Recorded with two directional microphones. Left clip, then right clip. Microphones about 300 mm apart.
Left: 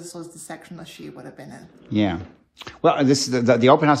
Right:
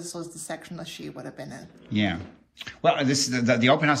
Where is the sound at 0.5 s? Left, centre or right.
Centre.